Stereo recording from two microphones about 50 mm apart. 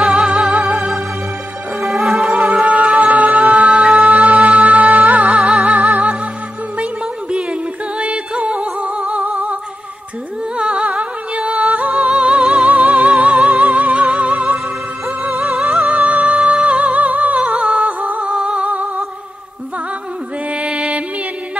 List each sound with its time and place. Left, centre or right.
0.1 s music: centre
1.8 s music: centre
2.3 s music: right
5.4 s music: centre
6.8 s music: right
10.6 s music: centre
12.6 s music: right
15.3 s music: centre
15.9 s music: right
20.5 s music: right